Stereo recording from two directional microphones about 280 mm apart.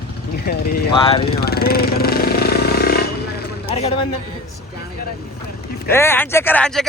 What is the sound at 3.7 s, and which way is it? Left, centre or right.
Speech, left.